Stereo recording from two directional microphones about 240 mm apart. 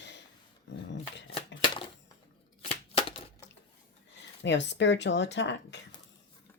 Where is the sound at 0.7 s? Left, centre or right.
Left.